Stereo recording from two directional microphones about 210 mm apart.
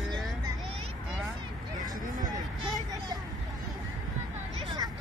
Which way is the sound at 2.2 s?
20° right (ahead or behind).